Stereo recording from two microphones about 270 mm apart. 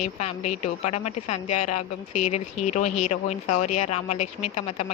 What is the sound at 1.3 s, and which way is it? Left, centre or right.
Speech, left.